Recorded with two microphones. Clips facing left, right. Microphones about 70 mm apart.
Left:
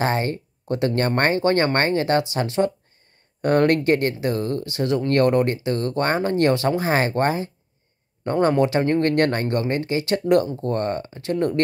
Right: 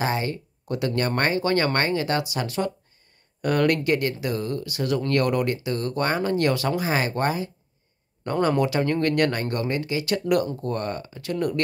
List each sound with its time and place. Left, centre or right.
0.0 s speech: left